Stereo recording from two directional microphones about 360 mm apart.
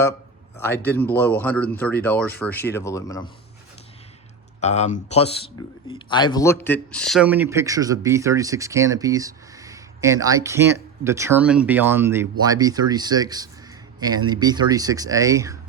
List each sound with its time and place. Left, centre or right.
0.6 s speech: centre
4.6 s speech: centre